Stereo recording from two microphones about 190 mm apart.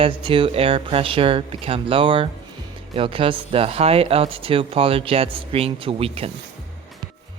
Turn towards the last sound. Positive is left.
turn(degrees=-30)  # may be behind; listen again after turning